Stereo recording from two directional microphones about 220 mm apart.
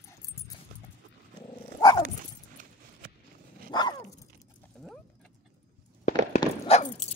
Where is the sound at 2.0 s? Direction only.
40° right (ahead or behind).